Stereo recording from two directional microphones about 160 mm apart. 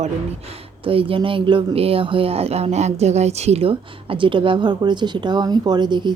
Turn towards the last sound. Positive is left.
turn(degrees=-30)  # may be behind; listen again after turning